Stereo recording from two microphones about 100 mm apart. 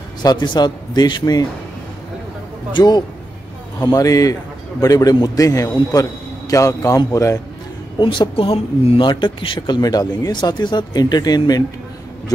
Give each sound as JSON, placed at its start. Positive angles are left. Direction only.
{"t": 0.2, "sound": "speech", "side_deg": 45}
{"t": 2.7, "sound": "a man's voice", "side_deg": 45}
{"t": 8.0, "sound": "speech", "side_deg": 55}
{"t": 9.6, "sound": "speech", "side_deg": 40}